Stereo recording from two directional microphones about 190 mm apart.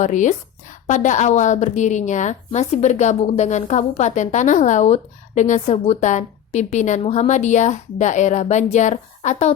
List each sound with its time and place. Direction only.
0.0 s a woman's voice: 40° left (ahead or behind)